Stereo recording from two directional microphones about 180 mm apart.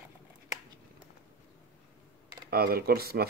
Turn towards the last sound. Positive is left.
turn(degrees=-60)  # may be behind; listen again after turning